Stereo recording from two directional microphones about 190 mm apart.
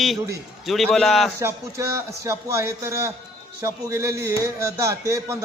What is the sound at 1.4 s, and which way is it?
A man's voice, 15° right (ahead or behind).